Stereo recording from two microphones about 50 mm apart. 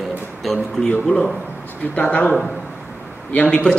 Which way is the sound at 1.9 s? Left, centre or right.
Left.